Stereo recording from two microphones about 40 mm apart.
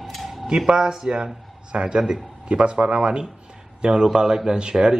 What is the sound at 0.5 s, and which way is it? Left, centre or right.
A man's voice, centre.